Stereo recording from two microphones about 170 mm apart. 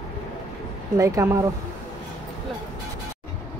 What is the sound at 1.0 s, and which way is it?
Speech, 20° right (ahead or behind).